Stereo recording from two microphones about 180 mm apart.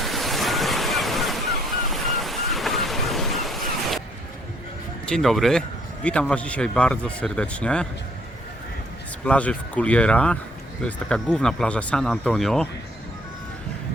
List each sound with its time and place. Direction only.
0.0 s waves: centre (ahead or behind)
1.9 s thunder: centre (ahead or behind)
5.0 s a man's voice: centre (ahead or behind)
9.2 s a man's voice: 5° left (ahead or behind)